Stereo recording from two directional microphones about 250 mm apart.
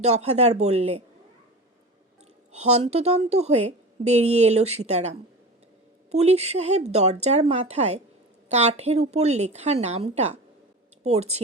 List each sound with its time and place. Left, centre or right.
0.0 s speech: right
2.5 s speech: right